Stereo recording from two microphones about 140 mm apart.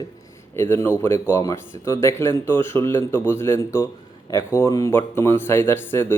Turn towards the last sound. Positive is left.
turn(degrees=15)  # may be behind; listen again after turning